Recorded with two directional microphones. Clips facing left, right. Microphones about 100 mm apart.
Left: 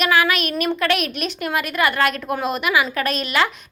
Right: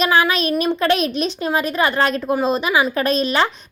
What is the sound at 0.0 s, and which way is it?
A woman's voice, 30° right (ahead or behind).